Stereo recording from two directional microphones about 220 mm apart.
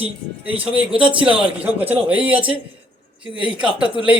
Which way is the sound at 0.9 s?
25° right (ahead or behind).